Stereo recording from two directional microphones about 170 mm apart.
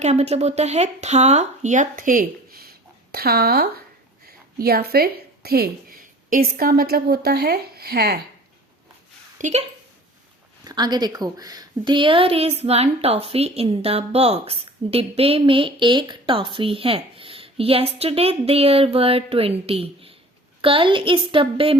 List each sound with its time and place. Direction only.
0.0 s a woman's voice: 40° right (ahead or behind); by 8.2 s 65° right (ahead or behind)
9.4 s a woman's voice: 40° right (ahead or behind)
10.6 s a woman's voice: 25° right (ahead or behind)